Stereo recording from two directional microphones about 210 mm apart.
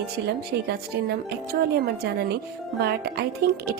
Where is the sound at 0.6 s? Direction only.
50° right (ahead or behind).